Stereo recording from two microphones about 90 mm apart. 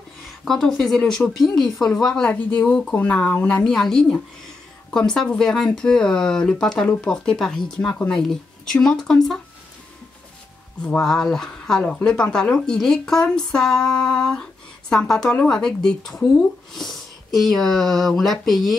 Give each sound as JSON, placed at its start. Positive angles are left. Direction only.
{"t": 0.5, "sound": "speech", "side_deg": 5}
{"t": 3.6, "sound": "speech", "side_deg": 5}
{"t": 10.8, "sound": "speech", "side_deg": 10}